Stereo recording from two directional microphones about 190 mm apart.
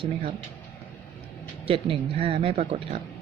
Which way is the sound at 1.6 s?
30° right (ahead or behind).